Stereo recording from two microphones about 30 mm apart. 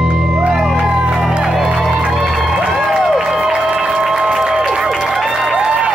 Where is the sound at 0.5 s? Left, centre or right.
Centre.